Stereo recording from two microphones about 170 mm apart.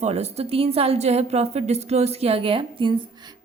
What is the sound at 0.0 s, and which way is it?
A woman's voice, 40° right (ahead or behind).